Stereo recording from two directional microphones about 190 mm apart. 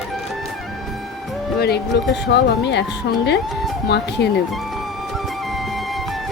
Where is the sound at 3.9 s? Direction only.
60° left (ahead or behind).